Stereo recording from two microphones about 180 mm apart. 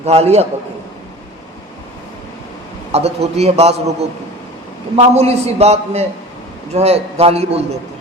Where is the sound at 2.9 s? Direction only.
35° right (ahead or behind).